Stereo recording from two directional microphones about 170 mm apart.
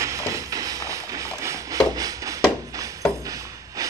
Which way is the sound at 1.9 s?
20° right (ahead or behind).